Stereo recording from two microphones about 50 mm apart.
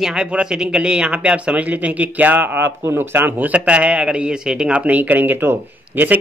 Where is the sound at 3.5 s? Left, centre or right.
Right.